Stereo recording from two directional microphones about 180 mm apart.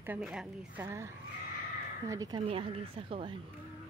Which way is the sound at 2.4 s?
30° right (ahead or behind).